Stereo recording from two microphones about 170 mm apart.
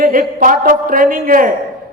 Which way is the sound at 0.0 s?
55° right (ahead or behind).